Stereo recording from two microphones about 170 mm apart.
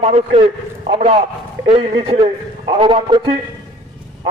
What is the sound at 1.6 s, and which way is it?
A man's voice, 30° right (ahead or behind).